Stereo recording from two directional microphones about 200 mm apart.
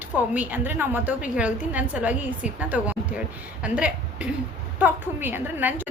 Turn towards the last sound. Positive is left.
turn(degrees=-10)  # may be behind; listen again after turning